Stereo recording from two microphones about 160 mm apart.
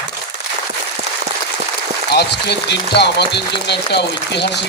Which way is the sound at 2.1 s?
90° left.